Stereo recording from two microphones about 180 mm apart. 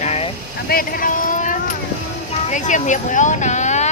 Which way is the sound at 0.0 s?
35° left (ahead or behind).